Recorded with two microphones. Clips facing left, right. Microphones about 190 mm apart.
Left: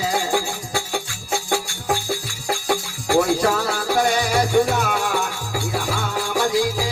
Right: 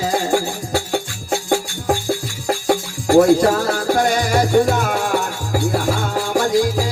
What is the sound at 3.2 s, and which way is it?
Music, 45° right (ahead or behind).